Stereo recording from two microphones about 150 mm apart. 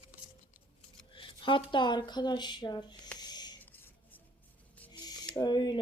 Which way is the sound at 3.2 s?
25° left (ahead or behind).